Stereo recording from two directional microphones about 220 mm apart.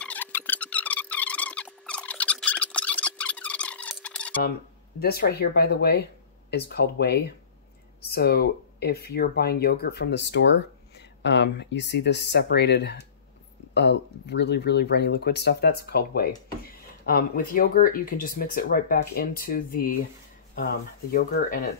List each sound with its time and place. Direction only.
0.0 s a sound: 5° left (ahead or behind)
4.9 s speech: 45° left (ahead or behind)
21.1 s speech: 40° left (ahead or behind)